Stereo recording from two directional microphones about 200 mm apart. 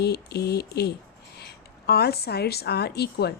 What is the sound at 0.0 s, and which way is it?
A woman's voice, 55° left (ahead or behind).